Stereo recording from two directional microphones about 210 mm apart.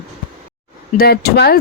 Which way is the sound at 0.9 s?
45° left (ahead or behind).